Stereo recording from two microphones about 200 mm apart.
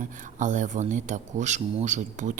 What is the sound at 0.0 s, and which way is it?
Speech, 40° right (ahead or behind).